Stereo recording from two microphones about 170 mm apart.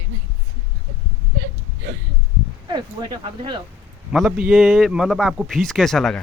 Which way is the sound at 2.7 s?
25° right (ahead or behind).